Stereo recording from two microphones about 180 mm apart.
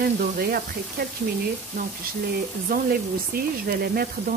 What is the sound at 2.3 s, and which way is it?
Speech, 55° right (ahead or behind).